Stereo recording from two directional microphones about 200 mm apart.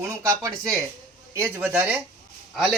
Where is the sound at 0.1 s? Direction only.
15° right (ahead or behind).